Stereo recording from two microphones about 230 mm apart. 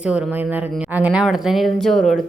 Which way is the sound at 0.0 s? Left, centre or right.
Centre.